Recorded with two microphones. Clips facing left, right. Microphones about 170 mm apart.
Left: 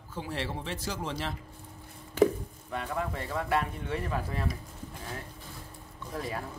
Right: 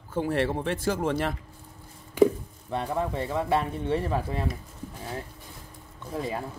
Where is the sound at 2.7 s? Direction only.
35° right (ahead or behind).